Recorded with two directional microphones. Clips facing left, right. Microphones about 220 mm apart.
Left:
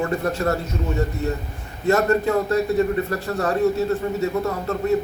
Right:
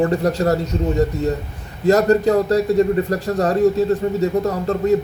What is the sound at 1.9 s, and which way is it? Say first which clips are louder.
Speech: right 5 dB; 35° right (ahead or behind).